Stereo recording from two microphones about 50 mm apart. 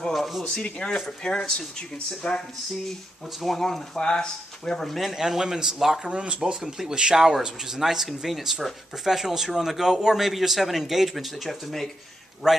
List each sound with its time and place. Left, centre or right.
0.1 s speech: centre
0.8 s speech: centre
4.8 s speech: centre
12.4 s speech: centre